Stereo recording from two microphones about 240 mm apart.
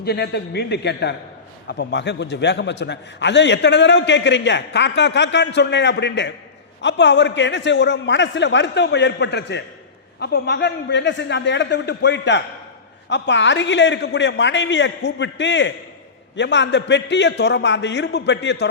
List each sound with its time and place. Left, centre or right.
0.0 s a man's voice: left